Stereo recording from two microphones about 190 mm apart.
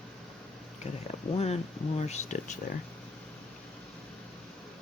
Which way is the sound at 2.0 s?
35° left (ahead or behind).